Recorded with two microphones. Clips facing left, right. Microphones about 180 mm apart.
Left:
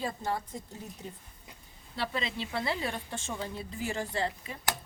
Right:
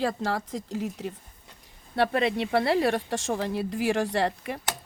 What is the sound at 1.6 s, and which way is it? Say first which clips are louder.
Speech: right 11 dB; 65° right (ahead or behind).